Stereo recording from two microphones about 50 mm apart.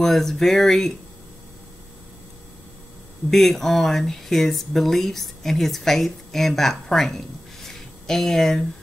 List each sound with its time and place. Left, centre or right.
0.0 s speech: centre
3.3 s speech: centre